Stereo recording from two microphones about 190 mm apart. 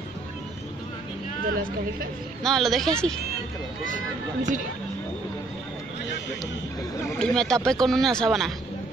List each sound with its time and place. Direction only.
1.4 s speech: 50° right (ahead or behind)
2.4 s speech: centre (ahead or behind)
3.8 s speech: 40° right (ahead or behind)
7.2 s speech: 5° left (ahead or behind)